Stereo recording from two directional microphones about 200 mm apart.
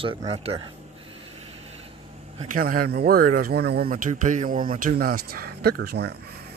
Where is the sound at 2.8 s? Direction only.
50° right (ahead or behind).